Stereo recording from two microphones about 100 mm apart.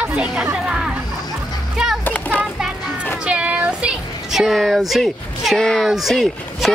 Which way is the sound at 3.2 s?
10° right (ahead or behind).